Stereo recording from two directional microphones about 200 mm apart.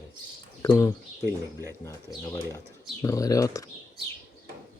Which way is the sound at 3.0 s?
15° left (ahead or behind).